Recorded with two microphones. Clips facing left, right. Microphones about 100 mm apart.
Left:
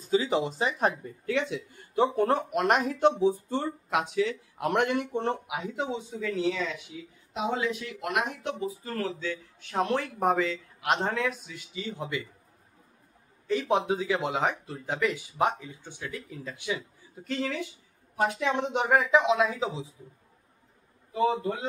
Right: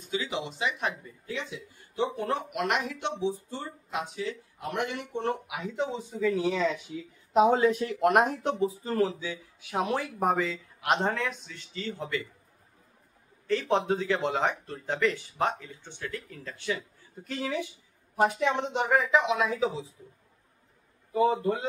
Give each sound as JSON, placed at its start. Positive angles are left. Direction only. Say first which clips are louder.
{"t": 0.1, "sound": "speech", "louder": "left 7 dB", "side_deg": 35}
{"t": 1.2, "sound": "speech", "louder": "left 8 dB", "side_deg": 65}
{"t": 2.1, "sound": "speech", "louder": "left 5 dB", "side_deg": 40}
{"t": 3.9, "sound": "speech", "louder": "left 6 dB", "side_deg": 90}
{"t": 4.9, "sound": "speech", "louder": "left 3 dB", "side_deg": 35}
{"t": 5.8, "sound": "speech", "louder": "right 5 dB", "side_deg": 0}
{"t": 6.4, "sound": "speech", "louder": "right 2 dB", "side_deg": -25}
{"t": 7.3, "sound": "speech", "louder": "right 8 dB", "side_deg": -40}
{"t": 8.8, "sound": "speech", "louder": "right 4 dB", "side_deg": -15}
{"t": 13.5, "sound": "speech", "louder": "even", "side_deg": 15}
{"t": 17.2, "sound": "speech", "louder": "left 1 dB", "side_deg": -5}
{"t": 18.7, "sound": "speech", "louder": "left 4 dB", "side_deg": 10}